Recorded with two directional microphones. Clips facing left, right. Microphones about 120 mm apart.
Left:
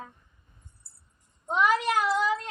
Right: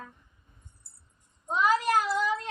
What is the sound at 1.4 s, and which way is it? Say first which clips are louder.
Speech: left 2 dB; 65° left (ahead or behind).